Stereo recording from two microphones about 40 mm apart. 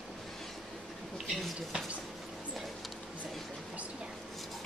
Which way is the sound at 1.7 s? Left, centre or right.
Right.